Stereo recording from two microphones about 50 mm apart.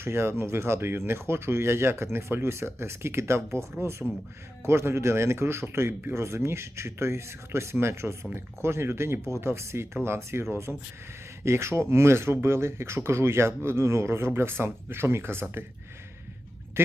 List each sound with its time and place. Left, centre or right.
0.0 s speech: right
16.8 s speech: right